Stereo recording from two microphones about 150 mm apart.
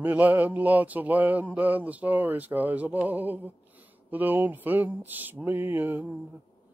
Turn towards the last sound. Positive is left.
turn(degrees=-15)  # may be behind; listen again after turning